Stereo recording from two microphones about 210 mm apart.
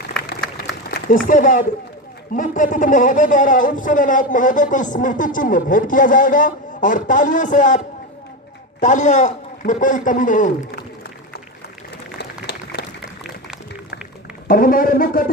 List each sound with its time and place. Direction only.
0.2 s a sound: 50° left (ahead or behind)
1.3 s speech: 40° left (ahead or behind)
8.8 s speech: 35° left (ahead or behind)
14.4 s speech: 40° left (ahead or behind)